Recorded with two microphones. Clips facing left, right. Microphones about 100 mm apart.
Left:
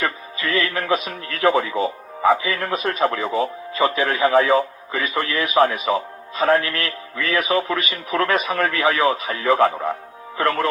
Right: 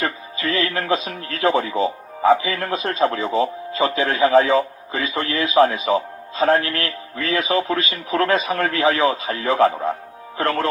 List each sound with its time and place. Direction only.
0.0 s speech: 30° right (ahead or behind)